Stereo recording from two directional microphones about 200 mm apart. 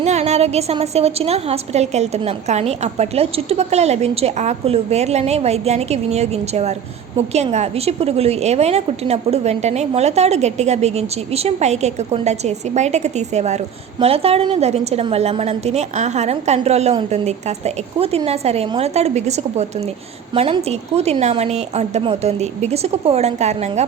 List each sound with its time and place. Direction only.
0.0 s a woman's voice: 35° right (ahead or behind)